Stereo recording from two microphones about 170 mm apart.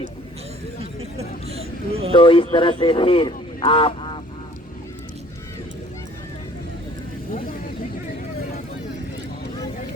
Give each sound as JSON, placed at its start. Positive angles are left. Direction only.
{"t": 1.2, "sound": "vehicle", "side_deg": -35}
{"t": 2.1, "sound": "speech", "side_deg": 30}